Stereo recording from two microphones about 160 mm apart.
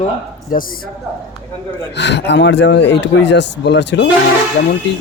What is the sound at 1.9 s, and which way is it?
Speech, 90° left.